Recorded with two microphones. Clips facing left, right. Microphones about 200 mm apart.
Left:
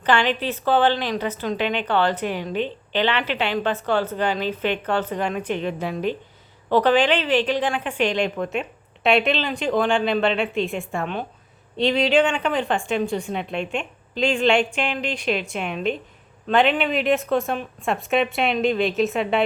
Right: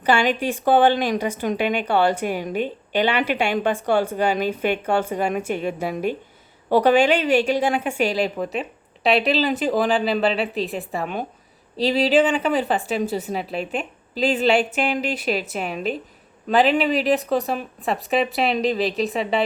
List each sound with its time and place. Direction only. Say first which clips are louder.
0.0 s a woman's voice: right 1 dB; 10° right (ahead or behind)